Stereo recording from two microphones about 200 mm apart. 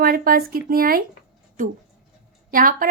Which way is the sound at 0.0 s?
45° right (ahead or behind).